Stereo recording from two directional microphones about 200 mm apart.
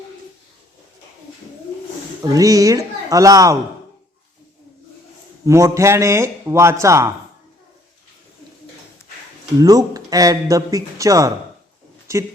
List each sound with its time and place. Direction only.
2.2 s speech: 15° right (ahead or behind)
5.5 s speech: 15° right (ahead or behind)
9.6 s speech: 20° right (ahead or behind)